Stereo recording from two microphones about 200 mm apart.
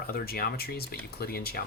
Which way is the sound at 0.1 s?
50° left (ahead or behind).